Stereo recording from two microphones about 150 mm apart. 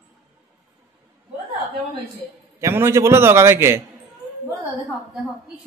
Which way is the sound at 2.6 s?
15° right (ahead or behind).